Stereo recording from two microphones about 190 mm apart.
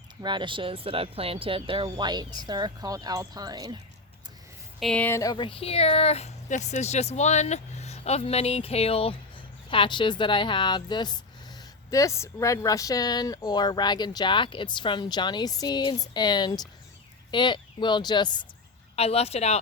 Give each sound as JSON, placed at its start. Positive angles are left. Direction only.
{"t": 0.2, "sound": "speech", "side_deg": -25}
{"t": 4.8, "sound": "speech", "side_deg": 5}